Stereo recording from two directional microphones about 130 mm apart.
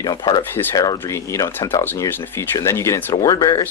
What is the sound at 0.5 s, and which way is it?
Speech, 20° left (ahead or behind).